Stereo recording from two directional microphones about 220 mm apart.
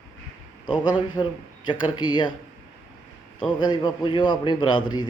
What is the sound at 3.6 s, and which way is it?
A man's voice, 20° left (ahead or behind).